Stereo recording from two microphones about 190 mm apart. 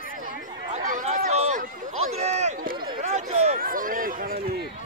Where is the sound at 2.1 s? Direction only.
35° right (ahead or behind).